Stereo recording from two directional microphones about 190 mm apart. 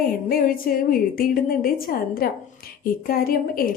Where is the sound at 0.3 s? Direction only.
50° left (ahead or behind).